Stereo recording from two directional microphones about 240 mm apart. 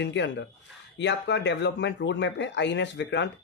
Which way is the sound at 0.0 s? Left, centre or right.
Left.